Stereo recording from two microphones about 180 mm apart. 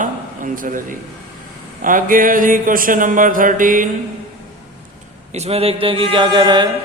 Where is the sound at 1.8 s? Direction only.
50° right (ahead or behind).